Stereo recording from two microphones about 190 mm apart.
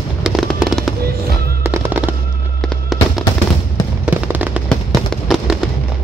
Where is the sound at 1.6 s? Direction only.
10° right (ahead or behind).